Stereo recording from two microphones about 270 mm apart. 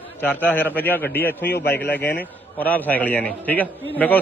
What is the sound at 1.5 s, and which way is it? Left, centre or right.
Speech, left.